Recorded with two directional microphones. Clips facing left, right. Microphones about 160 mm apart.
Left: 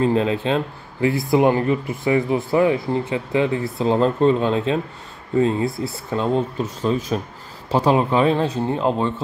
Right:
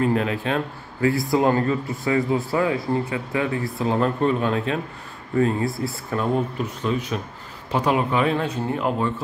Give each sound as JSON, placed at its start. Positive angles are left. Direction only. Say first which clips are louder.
{"t": 0.0, "sound": "speech", "louder": "left 3 dB", "side_deg": 25}
{"t": 6.8, "sound": "speech", "louder": "left 4 dB", "side_deg": 35}